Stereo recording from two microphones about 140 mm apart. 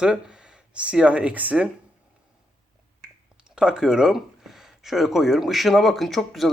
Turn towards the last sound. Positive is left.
turn(degrees=0)  # may be behind; listen again after turning